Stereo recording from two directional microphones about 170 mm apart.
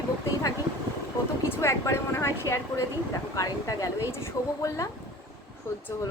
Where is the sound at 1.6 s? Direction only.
15° left (ahead or behind).